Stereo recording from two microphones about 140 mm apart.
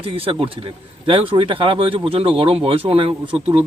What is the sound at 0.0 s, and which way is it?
Speech, 40° right (ahead or behind).